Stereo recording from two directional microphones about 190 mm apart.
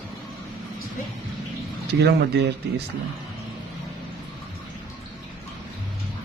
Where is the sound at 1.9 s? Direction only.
60° right (ahead or behind).